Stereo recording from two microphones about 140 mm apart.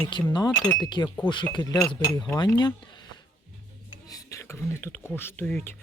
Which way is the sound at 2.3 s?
35° left (ahead or behind).